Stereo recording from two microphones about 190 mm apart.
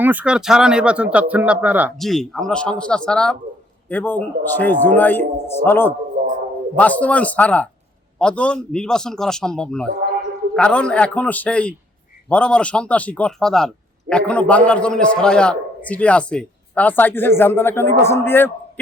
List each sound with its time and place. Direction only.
0.0 s a man's voice: 10° right (ahead or behind); by 5.9 s 10° left (ahead or behind)
6.2 s a sound: 40° right (ahead or behind)
6.7 s a man's voice: 10° left (ahead or behind)